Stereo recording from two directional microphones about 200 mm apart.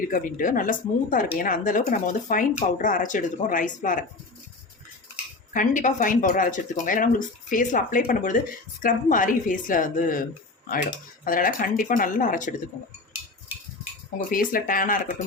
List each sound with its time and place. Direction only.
0.1 s a woman's voice: 45° left (ahead or behind)
5.5 s a woman's voice: 40° left (ahead or behind)
11.3 s speech: 45° left (ahead or behind)
14.3 s speech: 45° left (ahead or behind)